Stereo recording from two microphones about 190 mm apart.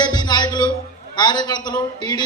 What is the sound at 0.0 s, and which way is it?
Music, 20° left (ahead or behind).